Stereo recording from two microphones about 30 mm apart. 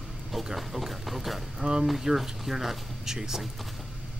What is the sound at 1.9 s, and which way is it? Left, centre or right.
Speech, centre.